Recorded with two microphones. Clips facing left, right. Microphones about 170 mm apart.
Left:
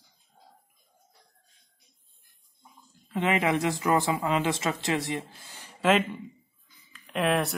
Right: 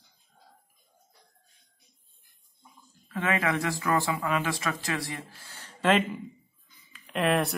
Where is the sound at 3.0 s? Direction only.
20° left (ahead or behind).